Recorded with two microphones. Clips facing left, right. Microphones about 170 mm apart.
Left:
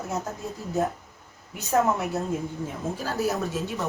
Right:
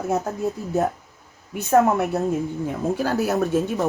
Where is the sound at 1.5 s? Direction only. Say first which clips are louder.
Right 6 dB; 55° right (ahead or behind).